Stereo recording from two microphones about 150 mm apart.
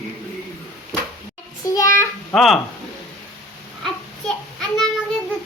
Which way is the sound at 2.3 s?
Centre (ahead or behind).